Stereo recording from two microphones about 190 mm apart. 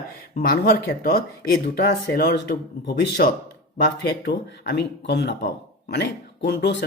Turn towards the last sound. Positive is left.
turn(degrees=65)  # may be behind; listen again after turning